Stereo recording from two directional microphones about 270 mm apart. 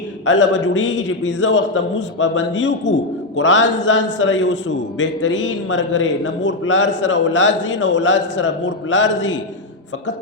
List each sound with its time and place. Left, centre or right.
0.3 s a man's voice: left